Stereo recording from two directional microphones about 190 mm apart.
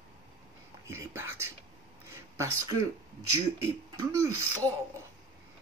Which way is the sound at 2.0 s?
15° right (ahead or behind).